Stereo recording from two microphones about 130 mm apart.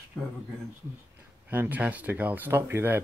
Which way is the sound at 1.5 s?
15° right (ahead or behind).